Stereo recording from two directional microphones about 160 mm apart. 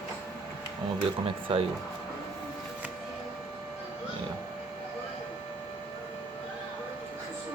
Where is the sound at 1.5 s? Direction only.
35° right (ahead or behind).